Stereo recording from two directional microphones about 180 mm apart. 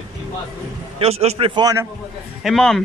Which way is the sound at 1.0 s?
35° right (ahead or behind).